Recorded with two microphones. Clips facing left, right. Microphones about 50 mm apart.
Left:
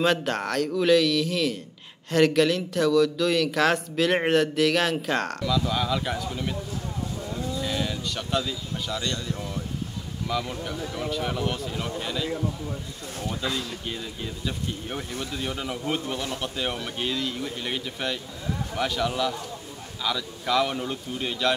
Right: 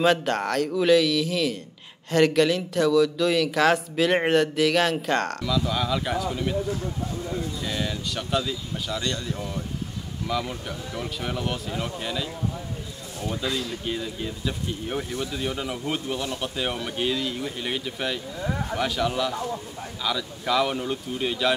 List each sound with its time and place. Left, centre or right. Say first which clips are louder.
0.0 s speech: right 2 dB; centre
7.6 s speech: even; centre
13.3 s speech: right 2 dB; centre
18.4 s speech: right 7 dB; right
18.8 s speech: even; centre